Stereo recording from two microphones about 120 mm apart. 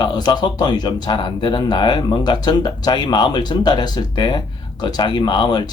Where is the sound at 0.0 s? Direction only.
35° left (ahead or behind).